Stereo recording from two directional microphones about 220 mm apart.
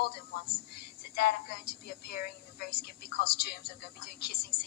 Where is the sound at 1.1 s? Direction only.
45° left (ahead or behind).